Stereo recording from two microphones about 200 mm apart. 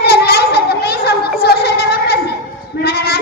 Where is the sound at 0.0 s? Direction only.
50° left (ahead or behind).